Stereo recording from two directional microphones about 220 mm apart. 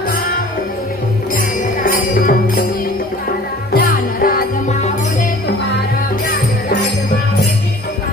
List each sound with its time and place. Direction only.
1.3 s music: 40° left (ahead or behind)
3.7 s music: 40° left (ahead or behind)